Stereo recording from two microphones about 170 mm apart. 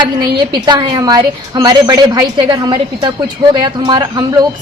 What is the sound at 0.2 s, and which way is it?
A woman's voice, 25° right (ahead or behind).